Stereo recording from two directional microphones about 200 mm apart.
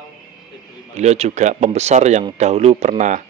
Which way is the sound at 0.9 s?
35° right (ahead or behind).